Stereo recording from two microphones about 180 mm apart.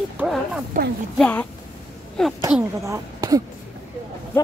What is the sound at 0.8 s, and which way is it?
Speech, 50° right (ahead or behind).